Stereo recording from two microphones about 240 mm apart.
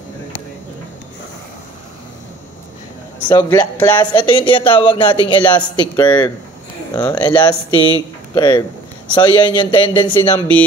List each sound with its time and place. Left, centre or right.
3.3 s speech: centre